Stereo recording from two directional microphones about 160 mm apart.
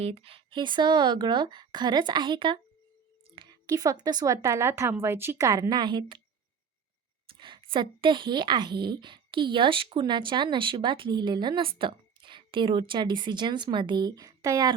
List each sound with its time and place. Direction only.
0.0 s a woman's voice: 40° right (ahead or behind)
7.3 s a woman's voice: 30° right (ahead or behind)